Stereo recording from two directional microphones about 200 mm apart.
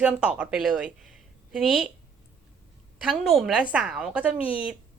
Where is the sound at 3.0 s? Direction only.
Centre (ahead or behind).